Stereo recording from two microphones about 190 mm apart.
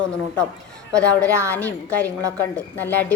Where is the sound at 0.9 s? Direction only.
5° left (ahead or behind).